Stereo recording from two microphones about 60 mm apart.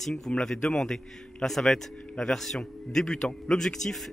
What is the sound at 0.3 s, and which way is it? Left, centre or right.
A man's voice, centre.